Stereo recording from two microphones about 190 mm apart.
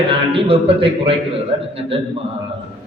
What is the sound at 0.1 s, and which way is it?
A man's voice, 30° right (ahead or behind).